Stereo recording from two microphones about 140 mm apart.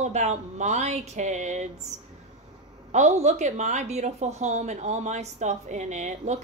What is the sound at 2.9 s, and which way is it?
A woman's voice, 55° right (ahead or behind).